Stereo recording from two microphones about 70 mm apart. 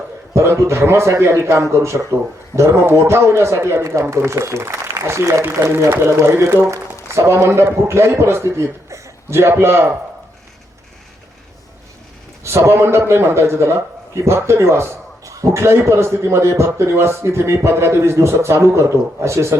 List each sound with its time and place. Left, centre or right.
0.3 s a man's voice: right
12.4 s a man's voice: right